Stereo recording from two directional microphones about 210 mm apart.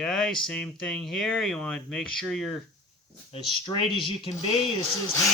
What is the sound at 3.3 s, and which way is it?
Speech, 25° left (ahead or behind).